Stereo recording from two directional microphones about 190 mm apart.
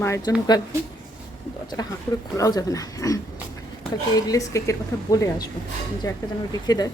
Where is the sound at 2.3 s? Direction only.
20° left (ahead or behind).